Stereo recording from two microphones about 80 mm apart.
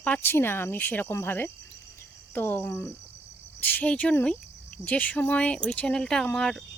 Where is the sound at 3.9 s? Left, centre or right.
Centre.